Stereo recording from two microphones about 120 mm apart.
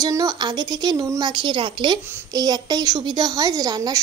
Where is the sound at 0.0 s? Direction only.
30° right (ahead or behind).